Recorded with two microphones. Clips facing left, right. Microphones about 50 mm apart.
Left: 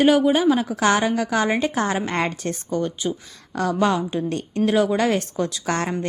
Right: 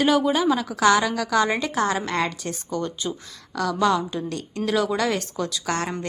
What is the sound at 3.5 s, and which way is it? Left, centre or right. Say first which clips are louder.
A woman's voice: left 1 dB; left.